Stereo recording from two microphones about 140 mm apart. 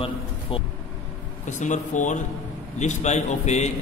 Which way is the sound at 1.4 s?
60° left (ahead or behind).